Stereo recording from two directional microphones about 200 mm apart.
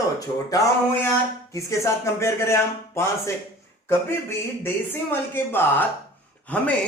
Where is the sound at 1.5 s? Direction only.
15° left (ahead or behind).